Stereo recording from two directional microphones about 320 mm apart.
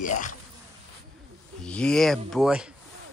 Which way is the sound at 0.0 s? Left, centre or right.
Left.